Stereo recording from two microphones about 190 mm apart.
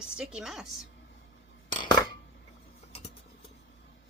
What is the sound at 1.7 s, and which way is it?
Coin, 25° left (ahead or behind).